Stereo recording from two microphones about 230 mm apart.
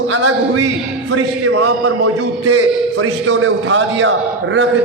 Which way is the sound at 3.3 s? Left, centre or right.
Right.